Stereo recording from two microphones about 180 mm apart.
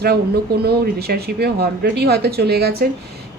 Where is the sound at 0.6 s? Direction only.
60° right (ahead or behind).